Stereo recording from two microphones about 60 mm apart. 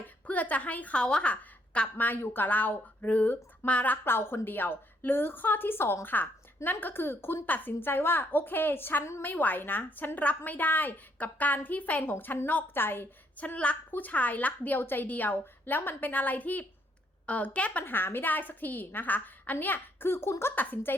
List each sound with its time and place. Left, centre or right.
0.3 s a woman's voice: left
2.0 s a woman's voice: left
4.0 s a woman's voice: left
12.1 s a woman's voice: left
13.3 s a woman's voice: left
17.8 s a woman's voice: left
20.6 s a woman's voice: left